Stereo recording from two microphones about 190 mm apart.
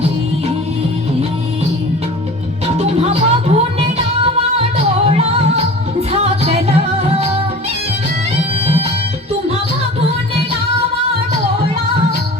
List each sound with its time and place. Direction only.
2.6 s music: 35° right (ahead or behind)
8.4 s music: 35° right (ahead or behind)